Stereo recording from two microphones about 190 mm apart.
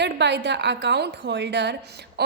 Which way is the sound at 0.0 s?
65° right (ahead or behind).